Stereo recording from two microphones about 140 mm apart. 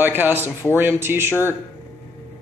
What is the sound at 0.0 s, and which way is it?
Speech, 15° right (ahead or behind).